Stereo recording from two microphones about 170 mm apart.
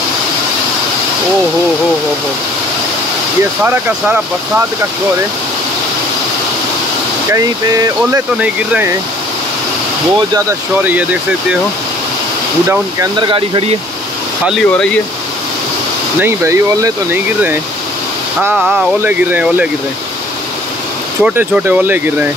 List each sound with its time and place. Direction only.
3.6 s speech: 10° right (ahead or behind)
7.2 s speech: 20° right (ahead or behind)
8.4 s speech: 10° right (ahead or behind)
10.8 s speech: 10° right (ahead or behind)
12.6 s speech: 15° right (ahead or behind)
13.3 s speech: 35° right (ahead or behind)
14.5 s speech: 5° left (ahead or behind)
16.2 s speech: 15° right (ahead or behind)
18.6 s speech: centre (ahead or behind)
21.2 s speech: 10° right (ahead or behind)